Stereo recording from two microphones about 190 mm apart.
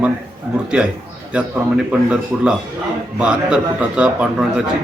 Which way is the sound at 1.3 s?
5° right (ahead or behind).